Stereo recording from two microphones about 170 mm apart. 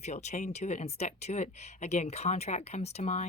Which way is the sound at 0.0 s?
40° left (ahead or behind).